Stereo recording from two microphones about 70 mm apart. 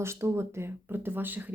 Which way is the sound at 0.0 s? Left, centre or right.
Right.